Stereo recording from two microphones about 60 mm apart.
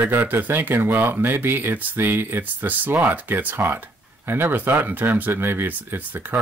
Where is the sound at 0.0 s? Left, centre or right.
Right.